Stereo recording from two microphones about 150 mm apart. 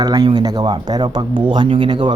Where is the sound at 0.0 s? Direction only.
25° right (ahead or behind).